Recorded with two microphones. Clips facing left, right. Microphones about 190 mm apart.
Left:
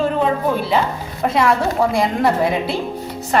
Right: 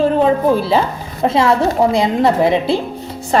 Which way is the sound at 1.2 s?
25° right (ahead or behind).